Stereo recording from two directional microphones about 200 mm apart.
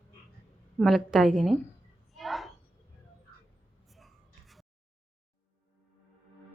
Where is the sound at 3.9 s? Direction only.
Centre (ahead or behind).